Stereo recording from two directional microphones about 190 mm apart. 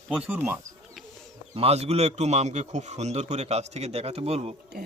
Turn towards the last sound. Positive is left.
turn(degrees=-30)  # may be behind; listen again after turning